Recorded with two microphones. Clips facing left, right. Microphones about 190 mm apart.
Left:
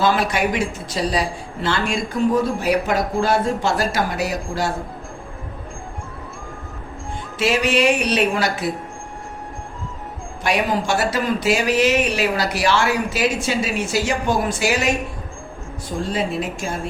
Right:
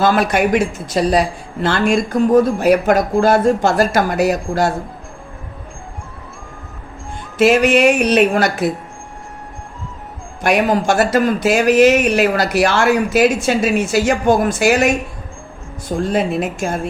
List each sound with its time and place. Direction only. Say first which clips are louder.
0.0 s a woman's voice: right 4 dB; 50° right (ahead or behind)
7.3 s speech: right 7 dB; 50° right (ahead or behind)
10.4 s speech: right 6 dB; 50° right (ahead or behind)
16.0 s a woman's voice: right 5 dB; 55° right (ahead or behind)